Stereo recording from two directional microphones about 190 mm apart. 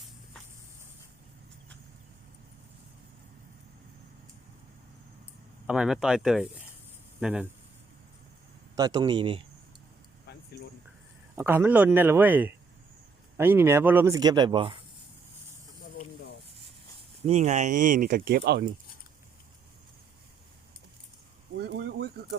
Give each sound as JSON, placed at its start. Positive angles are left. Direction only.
{"t": 5.6, "sound": "speech", "side_deg": -5}
{"t": 8.7, "sound": "speech", "side_deg": -20}
{"t": 10.3, "sound": "a sound", "side_deg": 60}
{"t": 11.3, "sound": "speech", "side_deg": -10}
{"t": 17.2, "sound": "speech", "side_deg": -35}
{"t": 21.6, "sound": "a sound", "side_deg": -60}